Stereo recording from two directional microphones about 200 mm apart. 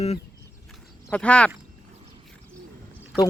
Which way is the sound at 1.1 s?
5° left (ahead or behind).